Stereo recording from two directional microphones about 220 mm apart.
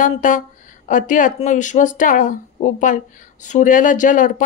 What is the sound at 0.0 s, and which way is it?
Speech, 35° left (ahead or behind).